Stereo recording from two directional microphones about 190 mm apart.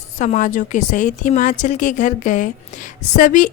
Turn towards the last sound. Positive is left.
turn(degrees=40)  # may be behind; listen again after turning